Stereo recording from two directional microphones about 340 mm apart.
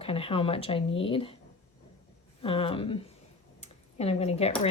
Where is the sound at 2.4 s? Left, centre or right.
Centre.